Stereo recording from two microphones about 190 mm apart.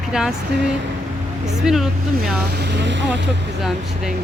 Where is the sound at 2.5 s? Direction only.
60° right (ahead or behind).